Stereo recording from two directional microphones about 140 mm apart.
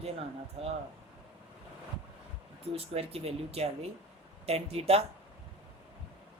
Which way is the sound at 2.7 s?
45° right (ahead or behind).